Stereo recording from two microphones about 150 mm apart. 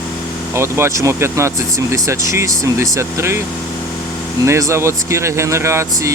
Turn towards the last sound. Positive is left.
turn(degrees=-20)  # may be behind; listen again after turning